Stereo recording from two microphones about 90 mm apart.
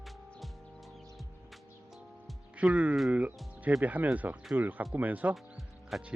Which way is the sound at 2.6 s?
15° right (ahead or behind).